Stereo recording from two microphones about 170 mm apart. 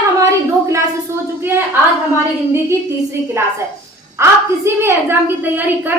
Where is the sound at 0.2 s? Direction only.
15° right (ahead or behind).